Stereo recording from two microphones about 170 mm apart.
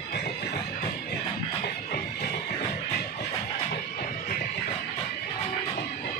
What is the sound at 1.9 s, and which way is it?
Music, 55° left (ahead or behind).